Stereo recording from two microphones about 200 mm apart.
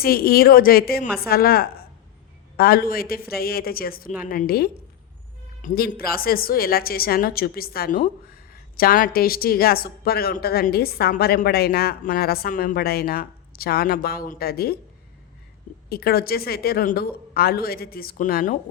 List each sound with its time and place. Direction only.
0.0 s a woman's voice: 50° left (ahead or behind)
15.9 s a woman's voice: 50° left (ahead or behind)